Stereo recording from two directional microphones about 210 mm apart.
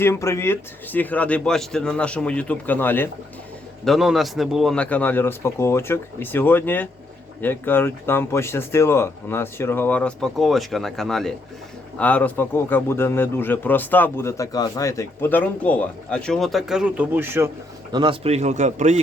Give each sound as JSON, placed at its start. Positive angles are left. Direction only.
{"t": 0.0, "sound": "a man's voice", "side_deg": 15}
{"t": 17.9, "sound": "a man's voice", "side_deg": -25}